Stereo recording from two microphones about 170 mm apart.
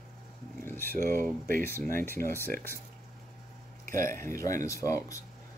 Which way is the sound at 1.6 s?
15° left (ahead or behind).